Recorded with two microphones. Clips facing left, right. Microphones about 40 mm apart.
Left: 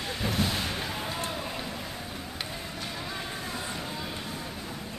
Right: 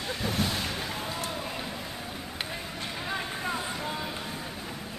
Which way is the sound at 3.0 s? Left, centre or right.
Right.